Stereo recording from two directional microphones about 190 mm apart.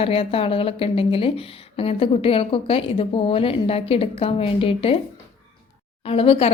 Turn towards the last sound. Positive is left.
turn(degrees=30)  # may be behind; listen again after turning